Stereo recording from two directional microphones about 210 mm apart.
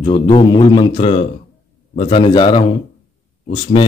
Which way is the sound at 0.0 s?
25° left (ahead or behind).